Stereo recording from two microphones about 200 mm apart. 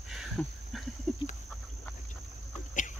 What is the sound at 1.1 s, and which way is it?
Chicken, centre (ahead or behind).